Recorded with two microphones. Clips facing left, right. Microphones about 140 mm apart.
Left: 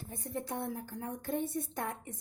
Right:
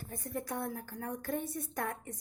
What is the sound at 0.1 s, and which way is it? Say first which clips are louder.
Speech: even; 25° left (ahead or behind).